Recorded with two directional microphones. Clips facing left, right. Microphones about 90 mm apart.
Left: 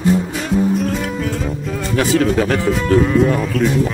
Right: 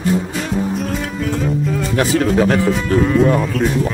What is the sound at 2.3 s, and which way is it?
Speech, 15° right (ahead or behind).